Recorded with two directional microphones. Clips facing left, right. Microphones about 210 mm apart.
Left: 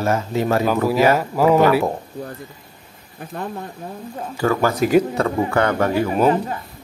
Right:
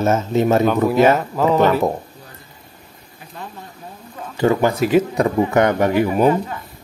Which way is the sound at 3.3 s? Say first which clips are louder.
Left 6 dB; 55° left (ahead or behind).